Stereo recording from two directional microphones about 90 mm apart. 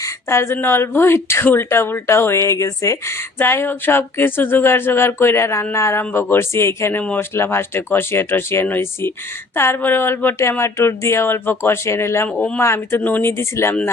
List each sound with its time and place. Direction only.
0.0 s speech: 30° left (ahead or behind)